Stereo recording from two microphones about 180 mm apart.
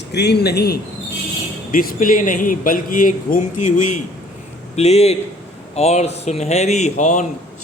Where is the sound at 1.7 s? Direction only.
50° left (ahead or behind).